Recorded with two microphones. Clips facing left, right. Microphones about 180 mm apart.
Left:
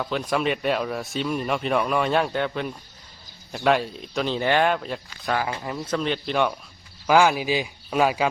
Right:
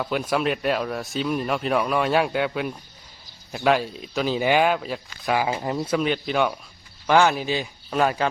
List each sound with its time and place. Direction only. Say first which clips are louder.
0.0 s speech: right 1 dB; 5° right (ahead or behind)
5.5 s speech: right 4 dB; 25° right (ahead or behind)
5.8 s speech: right 1 dB; 10° right (ahead or behind)
7.1 s speech: even; 5° left (ahead or behind)